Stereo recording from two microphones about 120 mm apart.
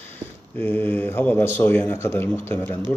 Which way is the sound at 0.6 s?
15° left (ahead or behind).